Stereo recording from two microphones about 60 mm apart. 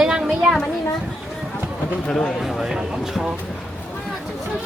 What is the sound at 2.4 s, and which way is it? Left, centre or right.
Speech, centre.